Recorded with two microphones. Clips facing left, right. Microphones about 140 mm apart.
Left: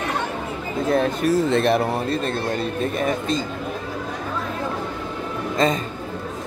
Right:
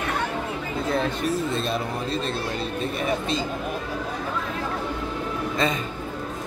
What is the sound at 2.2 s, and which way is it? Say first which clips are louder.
Speech: left 4 dB; 50° left (ahead or behind).